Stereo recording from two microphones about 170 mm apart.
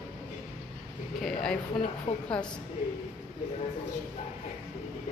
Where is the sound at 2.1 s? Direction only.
40° left (ahead or behind).